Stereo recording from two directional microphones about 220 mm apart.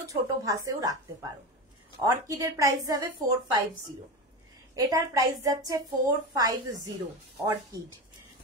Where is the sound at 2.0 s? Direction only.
15° right (ahead or behind).